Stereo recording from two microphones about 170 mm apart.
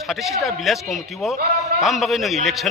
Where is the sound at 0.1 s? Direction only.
Centre (ahead or behind).